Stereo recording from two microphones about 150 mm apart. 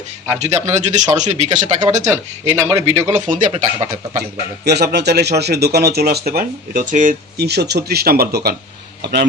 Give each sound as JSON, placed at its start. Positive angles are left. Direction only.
{"t": 0.3, "sound": "speech", "side_deg": -50}
{"t": 2.0, "sound": "speech", "side_deg": -20}
{"t": 3.1, "sound": "speech", "side_deg": -55}
{"t": 4.2, "sound": "a man's voice", "side_deg": -90}